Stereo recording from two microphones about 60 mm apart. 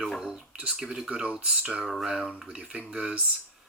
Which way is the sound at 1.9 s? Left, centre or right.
Centre.